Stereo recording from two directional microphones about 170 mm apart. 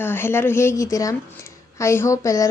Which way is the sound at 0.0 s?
15° left (ahead or behind).